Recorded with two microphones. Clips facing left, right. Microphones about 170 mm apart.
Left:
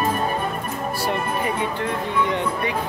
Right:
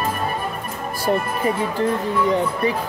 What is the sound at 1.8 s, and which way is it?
Speech, 35° right (ahead or behind).